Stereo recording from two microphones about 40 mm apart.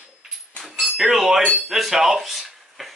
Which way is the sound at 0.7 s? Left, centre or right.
Centre.